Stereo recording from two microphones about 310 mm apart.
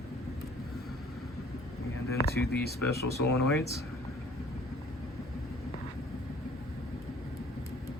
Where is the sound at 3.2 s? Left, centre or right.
Left.